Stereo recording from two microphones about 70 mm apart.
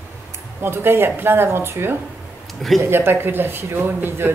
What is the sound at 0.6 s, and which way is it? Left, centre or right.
A woman's voice, right.